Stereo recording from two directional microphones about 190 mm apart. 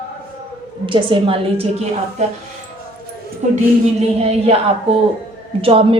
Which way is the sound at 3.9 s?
35° right (ahead or behind).